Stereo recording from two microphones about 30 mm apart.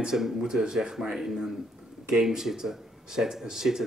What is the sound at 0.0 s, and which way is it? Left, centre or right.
Speech, centre.